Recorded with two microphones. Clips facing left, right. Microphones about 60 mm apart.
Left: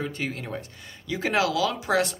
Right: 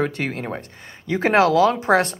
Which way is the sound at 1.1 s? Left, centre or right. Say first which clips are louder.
Right 8 dB; right.